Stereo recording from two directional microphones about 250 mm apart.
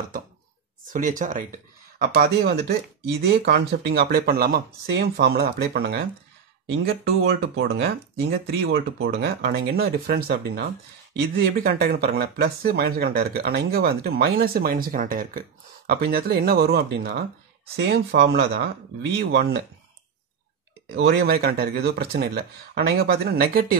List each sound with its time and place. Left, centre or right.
0.9 s speech: right
2.0 s speech: right
20.9 s speech: right